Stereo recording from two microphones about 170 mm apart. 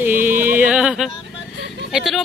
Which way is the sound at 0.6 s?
5° right (ahead or behind).